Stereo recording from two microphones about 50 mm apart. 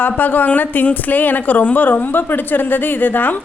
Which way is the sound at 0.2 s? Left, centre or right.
Left.